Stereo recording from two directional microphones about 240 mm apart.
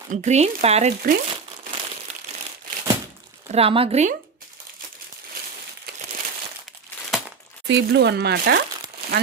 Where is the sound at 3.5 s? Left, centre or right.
Right.